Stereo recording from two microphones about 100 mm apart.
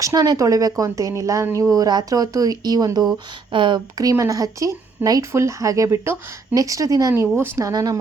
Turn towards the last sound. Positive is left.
turn(degrees=-35)  # may be behind; listen again after turning